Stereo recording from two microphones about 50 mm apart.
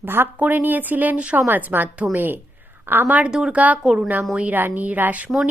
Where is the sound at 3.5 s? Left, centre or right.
Right.